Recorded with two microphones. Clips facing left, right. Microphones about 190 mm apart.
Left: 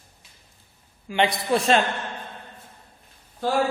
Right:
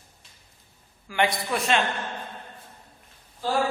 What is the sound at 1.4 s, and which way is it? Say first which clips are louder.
Speech: left 5 dB; 30° left (ahead or behind).